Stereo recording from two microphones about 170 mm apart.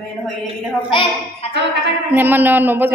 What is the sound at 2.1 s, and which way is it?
Speech, 10° right (ahead or behind).